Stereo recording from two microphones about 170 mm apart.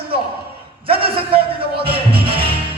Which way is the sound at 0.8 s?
30° right (ahead or behind).